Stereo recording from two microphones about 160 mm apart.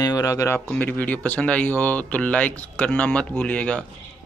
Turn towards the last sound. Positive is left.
turn(degrees=5)  # may be behind; listen again after turning